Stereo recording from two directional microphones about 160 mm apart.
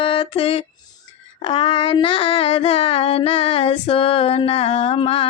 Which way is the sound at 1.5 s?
30° left (ahead or behind).